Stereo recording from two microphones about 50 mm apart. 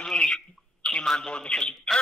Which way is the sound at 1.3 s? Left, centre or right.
Centre.